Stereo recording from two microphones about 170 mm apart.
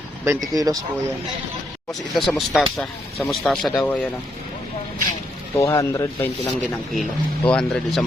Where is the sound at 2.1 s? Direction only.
Centre (ahead or behind).